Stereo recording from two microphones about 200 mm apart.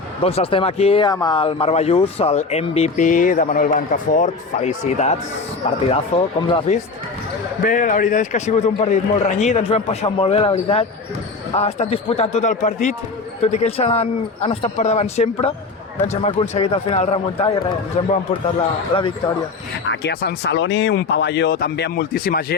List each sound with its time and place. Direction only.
0.2 s a man's voice: 30° left (ahead or behind)
7.6 s a man's voice: 40° left (ahead or behind)
18.9 s a man's voice: 25° left (ahead or behind)
19.9 s speech: 55° left (ahead or behind)